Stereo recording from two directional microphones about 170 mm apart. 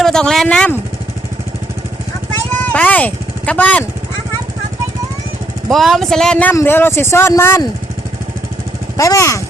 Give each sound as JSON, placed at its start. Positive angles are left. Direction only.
{"t": 0.0, "sound": "speech", "side_deg": 5}
{"t": 2.5, "sound": "vehicle", "side_deg": 10}
{"t": 5.7, "sound": "a man's voice", "side_deg": 0}
{"t": 9.0, "sound": "a man's voice", "side_deg": 20}